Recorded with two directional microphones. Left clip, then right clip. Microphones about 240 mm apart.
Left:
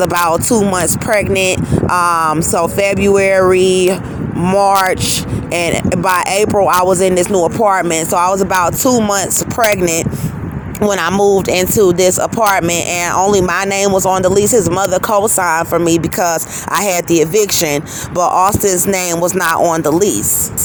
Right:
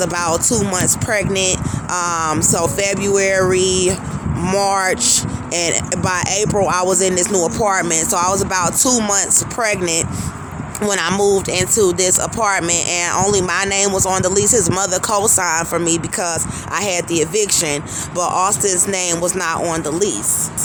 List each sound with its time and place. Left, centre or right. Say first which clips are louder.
0.0 s speech: left 5 dB; centre
9.1 s speech: left 3 dB; left